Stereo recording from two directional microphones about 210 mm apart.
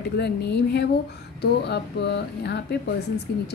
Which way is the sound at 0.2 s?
50° left (ahead or behind).